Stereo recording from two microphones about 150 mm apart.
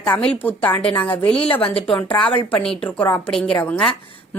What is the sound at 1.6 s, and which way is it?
Speech, 35° left (ahead or behind).